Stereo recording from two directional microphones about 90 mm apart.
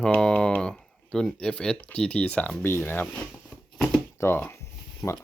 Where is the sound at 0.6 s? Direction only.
10° left (ahead or behind); by 3.1 s 25° left (ahead or behind).